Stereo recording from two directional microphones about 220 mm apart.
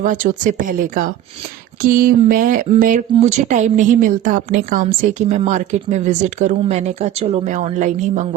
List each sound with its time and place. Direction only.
0.0 s speech: 35° right (ahead or behind)